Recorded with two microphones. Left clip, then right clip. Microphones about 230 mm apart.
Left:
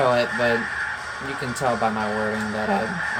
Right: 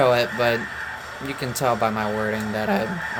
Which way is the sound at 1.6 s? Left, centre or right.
Right.